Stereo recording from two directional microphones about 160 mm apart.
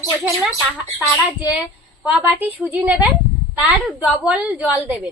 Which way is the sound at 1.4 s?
5° right (ahead or behind).